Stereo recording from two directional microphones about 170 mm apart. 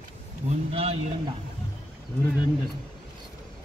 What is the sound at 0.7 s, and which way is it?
Speech, 35° right (ahead or behind).